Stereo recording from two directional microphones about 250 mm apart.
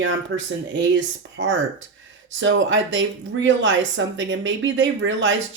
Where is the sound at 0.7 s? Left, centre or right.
Right.